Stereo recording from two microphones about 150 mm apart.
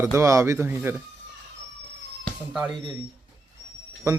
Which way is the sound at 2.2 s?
5° right (ahead or behind).